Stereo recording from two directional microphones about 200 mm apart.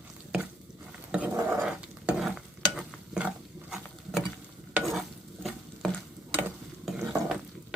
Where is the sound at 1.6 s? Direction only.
5° right (ahead or behind).